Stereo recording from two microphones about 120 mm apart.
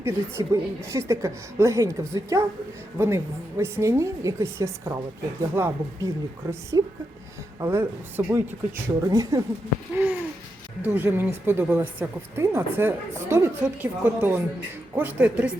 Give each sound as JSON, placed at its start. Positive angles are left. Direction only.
{"t": 0.0, "sound": "a woman's voice", "side_deg": -20}
{"t": 9.9, "sound": "a sound", "side_deg": -15}
{"t": 10.8, "sound": "a woman's voice", "side_deg": -15}